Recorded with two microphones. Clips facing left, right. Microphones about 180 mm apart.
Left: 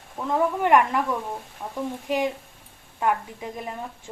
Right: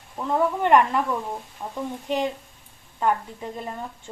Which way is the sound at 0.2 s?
5° left (ahead or behind).